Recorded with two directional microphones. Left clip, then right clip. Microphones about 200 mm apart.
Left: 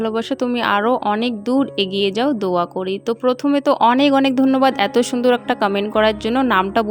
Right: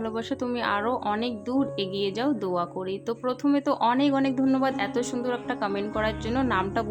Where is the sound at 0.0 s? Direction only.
35° left (ahead or behind).